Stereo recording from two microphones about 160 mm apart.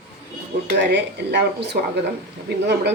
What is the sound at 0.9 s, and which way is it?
Speech, 90° right.